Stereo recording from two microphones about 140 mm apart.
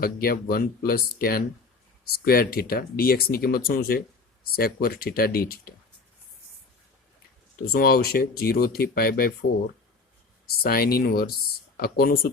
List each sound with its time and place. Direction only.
0.0 s speech: 90° left
7.7 s speech: 90° left
10.6 s speech: 90° left